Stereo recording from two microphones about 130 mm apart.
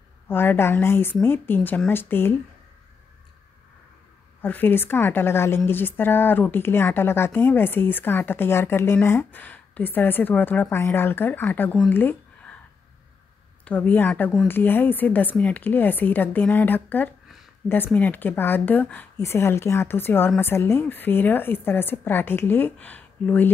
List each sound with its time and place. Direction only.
0.3 s a woman's voice: 15° left (ahead or behind)
4.4 s a woman's voice: 15° left (ahead or behind)
11.9 s a sound: 15° left (ahead or behind)
13.7 s a woman's voice: 15° left (ahead or behind)